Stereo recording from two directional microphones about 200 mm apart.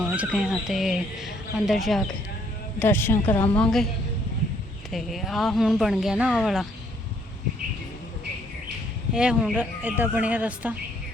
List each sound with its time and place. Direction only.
0.1 s a man's voice: 5° right (ahead or behind)
4.9 s speech: centre (ahead or behind)
9.1 s a woman's voice: 5° right (ahead or behind)